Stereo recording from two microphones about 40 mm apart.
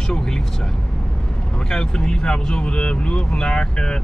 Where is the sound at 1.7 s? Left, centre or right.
Centre.